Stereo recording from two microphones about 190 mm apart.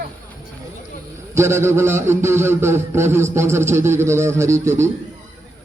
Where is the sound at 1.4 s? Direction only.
15° right (ahead or behind).